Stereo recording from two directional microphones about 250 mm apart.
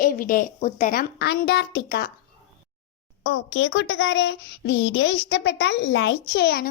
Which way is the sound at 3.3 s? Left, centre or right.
Left.